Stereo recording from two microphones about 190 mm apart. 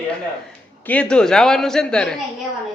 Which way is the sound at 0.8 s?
5° left (ahead or behind).